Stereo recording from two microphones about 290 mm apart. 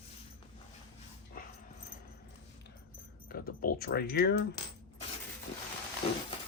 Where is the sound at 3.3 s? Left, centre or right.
Left.